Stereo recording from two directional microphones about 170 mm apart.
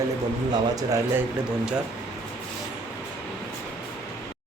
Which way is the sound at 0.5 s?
20° right (ahead or behind).